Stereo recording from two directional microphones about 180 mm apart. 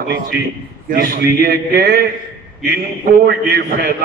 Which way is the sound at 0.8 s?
55° right (ahead or behind).